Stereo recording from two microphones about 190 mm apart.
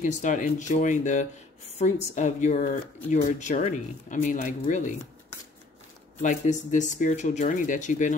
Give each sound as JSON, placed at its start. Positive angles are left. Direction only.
{"t": 0.0, "sound": "speech", "side_deg": 40}
{"t": 6.2, "sound": "speech", "side_deg": 40}